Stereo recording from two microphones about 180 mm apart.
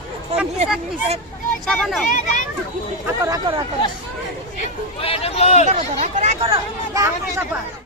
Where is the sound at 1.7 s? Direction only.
5° left (ahead or behind).